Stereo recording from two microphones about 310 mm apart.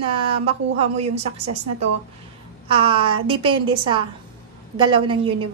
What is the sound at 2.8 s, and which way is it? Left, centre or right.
A woman's voice, centre.